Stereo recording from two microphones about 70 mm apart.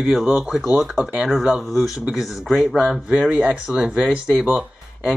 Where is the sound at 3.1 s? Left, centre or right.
Centre.